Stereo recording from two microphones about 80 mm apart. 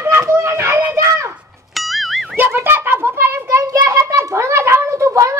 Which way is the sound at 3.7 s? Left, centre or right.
Right.